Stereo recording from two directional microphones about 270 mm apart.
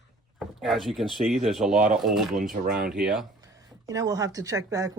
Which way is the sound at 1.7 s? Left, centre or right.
Right.